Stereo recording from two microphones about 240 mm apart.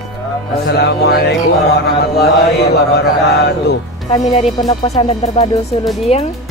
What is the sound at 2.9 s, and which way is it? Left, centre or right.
Music, left.